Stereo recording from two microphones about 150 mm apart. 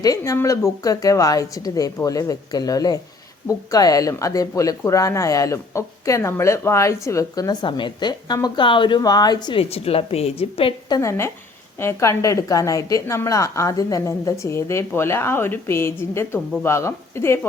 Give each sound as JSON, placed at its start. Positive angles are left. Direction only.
{"t": 0.0, "sound": "a woman's voice", "side_deg": 20}